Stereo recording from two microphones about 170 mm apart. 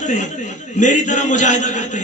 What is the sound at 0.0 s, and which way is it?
A man's voice, 45° left (ahead or behind).